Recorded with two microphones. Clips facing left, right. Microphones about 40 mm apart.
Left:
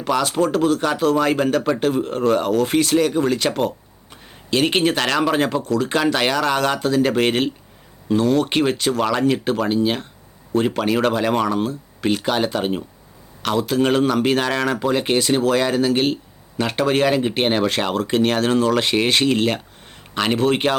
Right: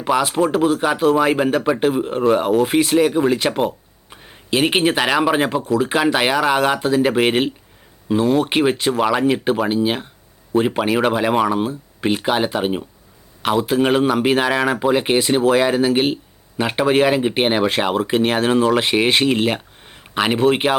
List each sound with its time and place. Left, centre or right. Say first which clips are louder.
0.0 s speech: right 2 dB; centre